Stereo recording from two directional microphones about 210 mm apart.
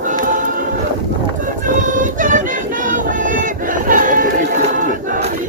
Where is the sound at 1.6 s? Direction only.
40° right (ahead or behind).